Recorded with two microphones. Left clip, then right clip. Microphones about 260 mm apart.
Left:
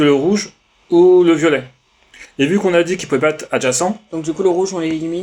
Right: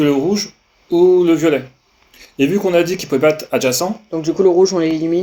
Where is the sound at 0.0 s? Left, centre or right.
Left.